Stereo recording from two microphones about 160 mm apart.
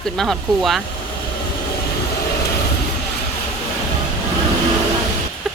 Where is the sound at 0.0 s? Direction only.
Centre (ahead or behind).